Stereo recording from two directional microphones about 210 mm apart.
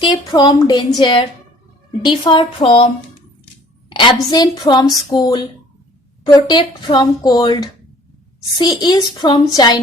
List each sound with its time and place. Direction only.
0.0 s a woman's voice: 20° left (ahead or behind)
8.8 s a woman's voice: 20° left (ahead or behind)